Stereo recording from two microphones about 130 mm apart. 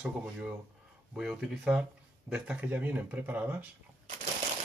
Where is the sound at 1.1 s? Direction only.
5° right (ahead or behind).